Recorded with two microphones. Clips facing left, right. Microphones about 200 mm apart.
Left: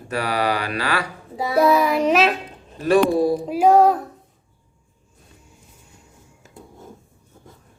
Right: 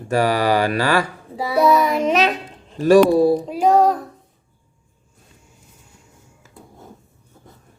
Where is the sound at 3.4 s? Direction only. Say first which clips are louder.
Left 1 dB; 5° left (ahead or behind).